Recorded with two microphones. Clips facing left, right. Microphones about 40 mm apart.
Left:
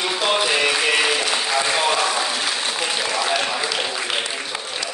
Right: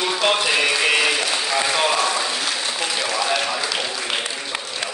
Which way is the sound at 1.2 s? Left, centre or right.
Left.